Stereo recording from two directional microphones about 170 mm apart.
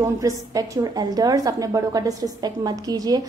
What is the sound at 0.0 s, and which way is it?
A woman's voice, 20° right (ahead or behind).